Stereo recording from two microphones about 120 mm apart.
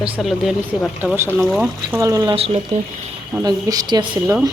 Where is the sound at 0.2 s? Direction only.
Centre (ahead or behind).